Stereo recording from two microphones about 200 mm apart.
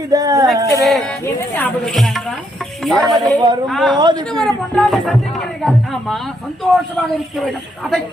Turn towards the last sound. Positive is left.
turn(degrees=0)  # may be behind; listen again after turning